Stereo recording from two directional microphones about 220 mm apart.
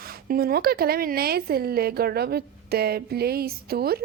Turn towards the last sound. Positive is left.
turn(degrees=-45)  # may be behind; listen again after turning